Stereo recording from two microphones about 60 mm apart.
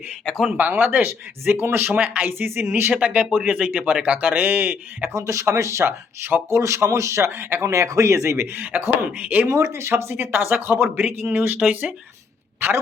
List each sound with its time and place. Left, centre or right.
0.3 s speech: centre
0.5 s speech: right
3.0 s speech: centre
4.1 s speech: right
5.1 s speech: right
6.6 s speech: right
7.3 s speech: right
7.6 s speech: right
8.4 s speech: right
9.5 s speech: right
12.5 s a man's voice: right